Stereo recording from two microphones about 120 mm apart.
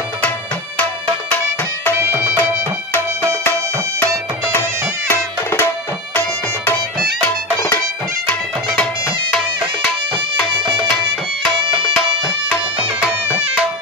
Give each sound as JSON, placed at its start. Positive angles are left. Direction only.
{"t": 2.0, "sound": "music", "side_deg": -15}
{"t": 4.6, "sound": "music", "side_deg": 20}